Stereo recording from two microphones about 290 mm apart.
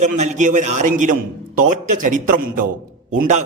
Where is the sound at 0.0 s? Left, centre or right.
Right.